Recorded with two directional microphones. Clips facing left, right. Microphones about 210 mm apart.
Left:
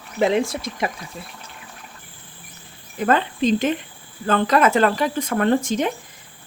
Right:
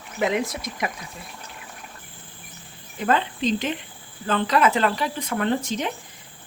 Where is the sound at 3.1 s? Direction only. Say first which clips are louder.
Left 4 dB; 50° left (ahead or behind).